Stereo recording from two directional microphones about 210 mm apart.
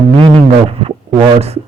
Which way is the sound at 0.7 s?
25° right (ahead or behind).